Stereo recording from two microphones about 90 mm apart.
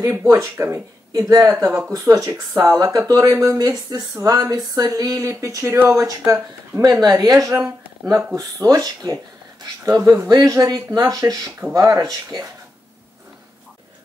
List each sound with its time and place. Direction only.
0.0 s speech: 30° right (ahead or behind); by 12.4 s 45° right (ahead or behind)